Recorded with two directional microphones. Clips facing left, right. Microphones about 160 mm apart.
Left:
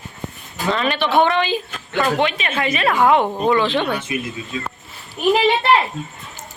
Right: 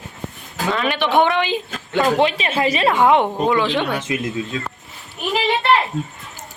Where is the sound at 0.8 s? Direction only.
15° right (ahead or behind).